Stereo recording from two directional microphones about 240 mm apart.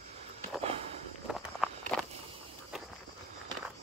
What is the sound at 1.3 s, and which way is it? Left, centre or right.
Walk, centre.